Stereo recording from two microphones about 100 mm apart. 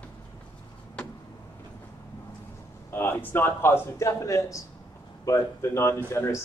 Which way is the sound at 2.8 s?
20° left (ahead or behind).